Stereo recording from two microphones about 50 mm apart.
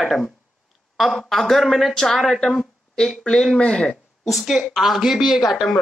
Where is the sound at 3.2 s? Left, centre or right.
Centre.